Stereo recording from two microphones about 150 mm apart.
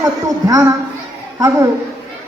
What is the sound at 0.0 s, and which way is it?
Speech, 25° right (ahead or behind).